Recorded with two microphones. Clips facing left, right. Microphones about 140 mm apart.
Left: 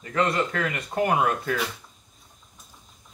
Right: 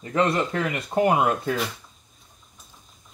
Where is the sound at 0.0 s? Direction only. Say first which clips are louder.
Right 2 dB; 25° right (ahead or behind).